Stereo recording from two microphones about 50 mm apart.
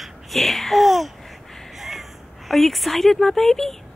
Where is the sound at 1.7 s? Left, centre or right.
Centre.